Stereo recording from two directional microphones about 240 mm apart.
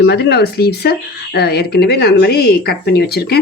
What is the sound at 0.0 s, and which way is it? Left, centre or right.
A woman's voice, left.